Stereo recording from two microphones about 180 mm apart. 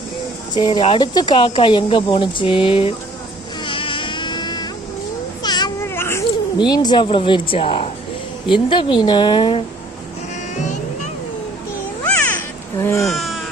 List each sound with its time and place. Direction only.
0.5 s speech: 25° left (ahead or behind)
3.6 s insect: 30° left (ahead or behind)
5.4 s a sound: 25° left (ahead or behind)
5.9 s baby cry: 15° left (ahead or behind)
6.6 s speech: 25° left (ahead or behind)
12.0 s babbling: 10° left (ahead or behind)
13.0 s baby cry: centre (ahead or behind)